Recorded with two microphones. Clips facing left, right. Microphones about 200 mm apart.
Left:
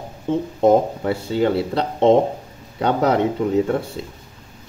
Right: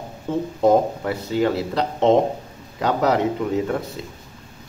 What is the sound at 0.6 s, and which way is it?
Speech, 25° left (ahead or behind).